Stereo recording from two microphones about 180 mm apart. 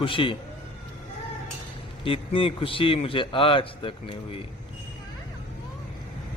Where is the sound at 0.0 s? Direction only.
30° left (ahead or behind).